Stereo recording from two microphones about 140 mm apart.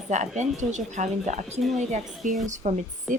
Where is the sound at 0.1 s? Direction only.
60° right (ahead or behind).